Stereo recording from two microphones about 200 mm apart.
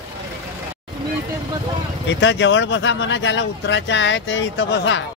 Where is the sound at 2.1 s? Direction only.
65° left (ahead or behind).